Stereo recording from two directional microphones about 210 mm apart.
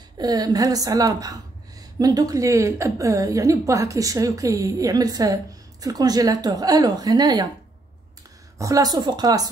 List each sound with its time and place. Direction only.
0.2 s a woman's voice: 20° right (ahead or behind)
8.5 s a woman's voice: 15° right (ahead or behind)